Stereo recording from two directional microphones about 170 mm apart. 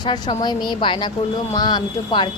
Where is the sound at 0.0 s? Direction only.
25° left (ahead or behind).